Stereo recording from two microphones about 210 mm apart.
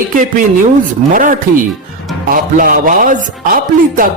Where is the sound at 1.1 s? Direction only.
40° right (ahead or behind).